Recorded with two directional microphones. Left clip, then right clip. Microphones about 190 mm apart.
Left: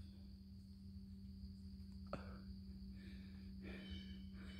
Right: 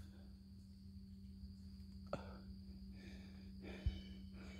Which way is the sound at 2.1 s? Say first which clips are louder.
Right 4 dB; 20° right (ahead or behind).